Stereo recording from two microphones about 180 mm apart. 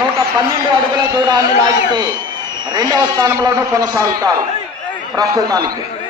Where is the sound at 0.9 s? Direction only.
25° right (ahead or behind).